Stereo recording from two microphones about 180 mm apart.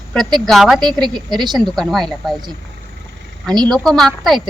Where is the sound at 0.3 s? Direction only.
Centre (ahead or behind).